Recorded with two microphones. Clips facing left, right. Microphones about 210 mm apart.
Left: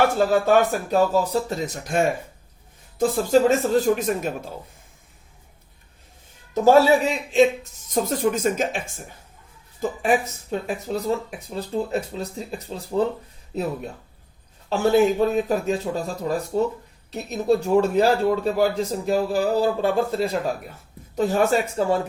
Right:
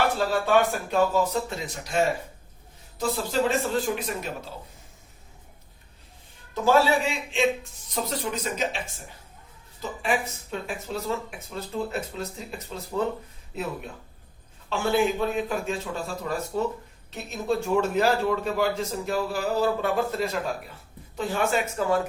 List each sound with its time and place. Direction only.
0.2 s a man's voice: 45° left (ahead or behind)
6.5 s a man's voice: 40° left (ahead or behind)
14.7 s speech: 40° left (ahead or behind)
21.2 s speech: 40° left (ahead or behind)